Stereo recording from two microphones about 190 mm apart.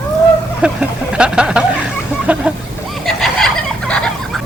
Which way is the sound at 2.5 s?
5° right (ahead or behind).